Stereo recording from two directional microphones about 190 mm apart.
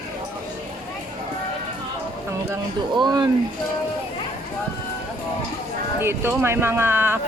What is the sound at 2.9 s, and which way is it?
Speech, 20° right (ahead or behind).